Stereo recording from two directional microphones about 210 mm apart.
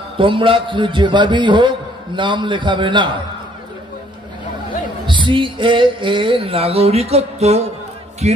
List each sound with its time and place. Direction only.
0.2 s a man's voice: 25° right (ahead or behind)
5.0 s a man's voice: 20° right (ahead or behind)